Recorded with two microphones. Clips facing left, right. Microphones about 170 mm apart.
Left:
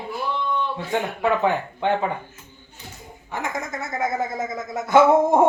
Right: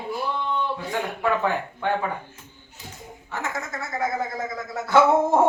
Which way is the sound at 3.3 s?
15° left (ahead or behind).